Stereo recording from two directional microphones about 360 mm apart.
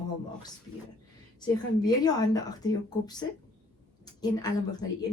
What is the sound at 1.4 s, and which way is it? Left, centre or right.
Speech, centre.